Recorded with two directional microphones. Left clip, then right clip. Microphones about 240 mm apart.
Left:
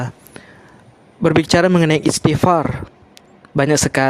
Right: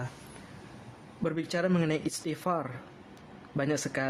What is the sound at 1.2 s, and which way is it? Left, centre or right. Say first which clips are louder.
Speech: left 17 dB; left.